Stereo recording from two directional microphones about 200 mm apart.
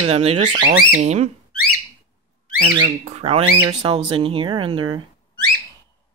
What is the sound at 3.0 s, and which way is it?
Speech, 30° right (ahead or behind).